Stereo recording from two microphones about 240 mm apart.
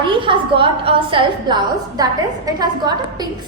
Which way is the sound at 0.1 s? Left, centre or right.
Right.